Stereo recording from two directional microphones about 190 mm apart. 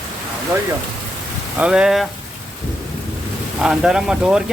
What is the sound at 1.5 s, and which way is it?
Speech, 5° right (ahead or behind).